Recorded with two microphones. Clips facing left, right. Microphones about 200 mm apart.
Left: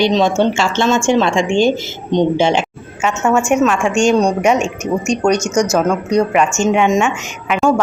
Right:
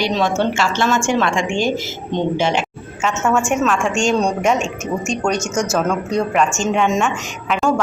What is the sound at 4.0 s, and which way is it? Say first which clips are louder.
Speech: left 6 dB; 40° left (ahead or behind).